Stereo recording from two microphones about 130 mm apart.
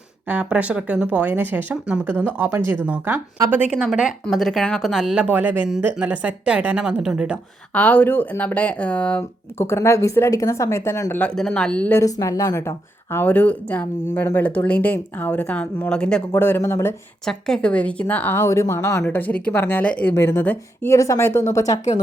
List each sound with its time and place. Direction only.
0.3 s speech: 10° right (ahead or behind)
7.7 s speech: 10° left (ahead or behind)
9.6 s speech: 20° left (ahead or behind)
11.2 s speech: 5° left (ahead or behind)
12.0 s speech: 25° left (ahead or behind); by 16.2 s 5° left (ahead or behind)
16.3 s speech: 15° left (ahead or behind)
17.2 s speech: 5° left (ahead or behind); by 19.0 s 25° left (ahead or behind)
19.0 s speech: 10° left (ahead or behind)